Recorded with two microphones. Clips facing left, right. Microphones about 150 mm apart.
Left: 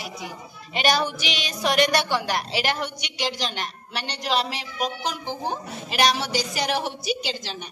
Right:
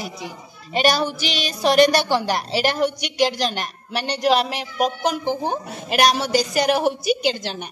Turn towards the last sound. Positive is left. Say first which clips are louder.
# right 8 dB
turn(degrees=-55)  # may be behind; listen again after turning